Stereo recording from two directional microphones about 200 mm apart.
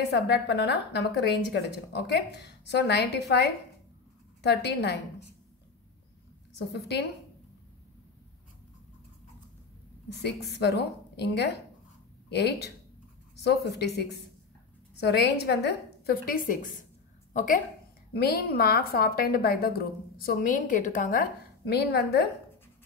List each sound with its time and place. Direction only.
0.1 s a woman's voice: 55° left (ahead or behind)
4.4 s a woman's voice: 60° left (ahead or behind)
6.7 s a woman's voice: 55° left (ahead or behind)
10.6 s a woman's voice: 55° left (ahead or behind); by 17.6 s 40° left (ahead or behind)
18.1 s a woman's voice: 50° left (ahead or behind)